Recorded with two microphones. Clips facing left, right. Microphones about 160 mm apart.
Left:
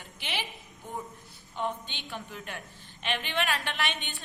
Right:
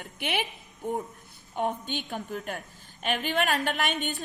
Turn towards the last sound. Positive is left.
turn(degrees=-45)  # may be behind; listen again after turning